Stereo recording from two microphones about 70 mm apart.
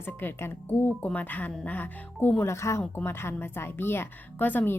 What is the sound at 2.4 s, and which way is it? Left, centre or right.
A woman's voice, left.